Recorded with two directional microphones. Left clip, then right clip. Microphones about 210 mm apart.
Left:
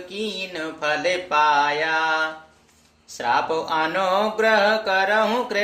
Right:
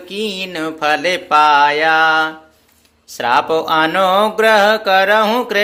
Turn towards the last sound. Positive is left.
turn(degrees=-50)  # may be behind; listen again after turning